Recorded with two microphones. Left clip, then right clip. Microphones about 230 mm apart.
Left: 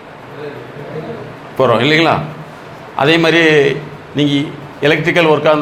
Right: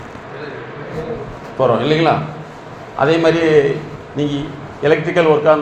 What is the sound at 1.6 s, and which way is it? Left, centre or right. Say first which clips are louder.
A man's voice: left 3 dB; left.